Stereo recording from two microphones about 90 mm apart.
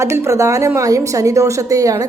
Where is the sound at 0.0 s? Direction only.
35° right (ahead or behind).